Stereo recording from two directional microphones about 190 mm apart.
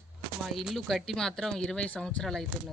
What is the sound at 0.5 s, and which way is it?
Speech, centre (ahead or behind).